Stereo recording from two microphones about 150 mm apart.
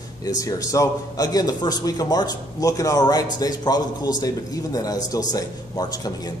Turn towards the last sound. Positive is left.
turn(degrees=25)  # may be behind; listen again after turning